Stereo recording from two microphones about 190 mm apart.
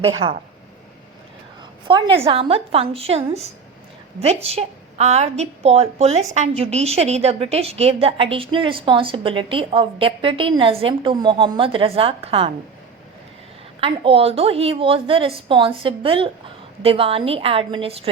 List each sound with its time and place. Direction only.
0.0 s a woman's voice: 30° right (ahead or behind)
1.9 s a woman's voice: 25° right (ahead or behind)
13.8 s a woman's voice: 30° right (ahead or behind)